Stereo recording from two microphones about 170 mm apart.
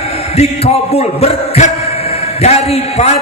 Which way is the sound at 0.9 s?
40° left (ahead or behind).